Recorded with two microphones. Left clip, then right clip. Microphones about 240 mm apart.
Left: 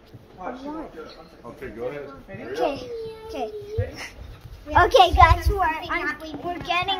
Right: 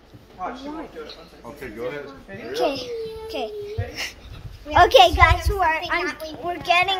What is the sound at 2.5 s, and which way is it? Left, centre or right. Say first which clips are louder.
A woman's voice: right 2 dB; centre.